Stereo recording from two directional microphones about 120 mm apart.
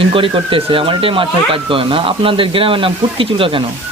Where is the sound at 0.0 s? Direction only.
50° right (ahead or behind).